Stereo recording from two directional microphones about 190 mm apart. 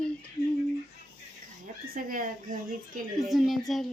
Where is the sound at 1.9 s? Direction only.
45° right (ahead or behind).